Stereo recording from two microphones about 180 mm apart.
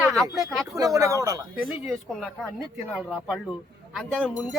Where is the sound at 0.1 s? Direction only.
Centre (ahead or behind).